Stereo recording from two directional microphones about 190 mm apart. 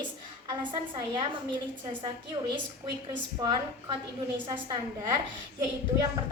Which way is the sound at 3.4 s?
25° right (ahead or behind).